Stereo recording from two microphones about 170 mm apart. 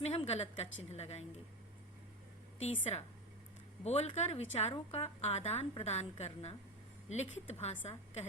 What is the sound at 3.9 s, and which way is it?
A woman's voice, 40° left (ahead or behind).